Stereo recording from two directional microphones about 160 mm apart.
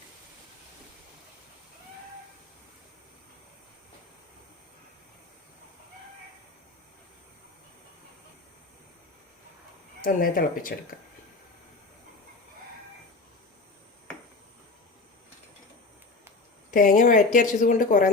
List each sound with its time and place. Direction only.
10.0 s speech: 60° left (ahead or behind)
16.7 s speech: 55° left (ahead or behind)